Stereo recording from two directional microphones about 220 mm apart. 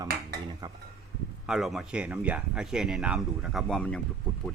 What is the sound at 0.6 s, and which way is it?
Speech, 20° right (ahead or behind).